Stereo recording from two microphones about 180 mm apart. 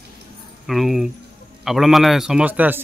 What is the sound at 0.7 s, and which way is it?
A man's voice, centre (ahead or behind).